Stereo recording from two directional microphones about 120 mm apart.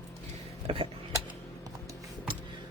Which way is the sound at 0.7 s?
50° right (ahead or behind).